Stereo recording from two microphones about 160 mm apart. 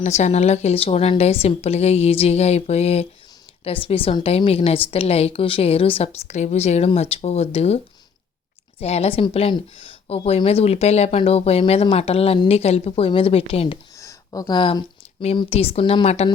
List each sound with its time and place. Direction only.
0.0 s a woman's voice: 45° left (ahead or behind)
8.8 s a woman's voice: 40° left (ahead or behind)
13.9 s a sound: 20° left (ahead or behind); by 15.4 s 35° left (ahead or behind)
15.4 s a woman's voice: 40° left (ahead or behind)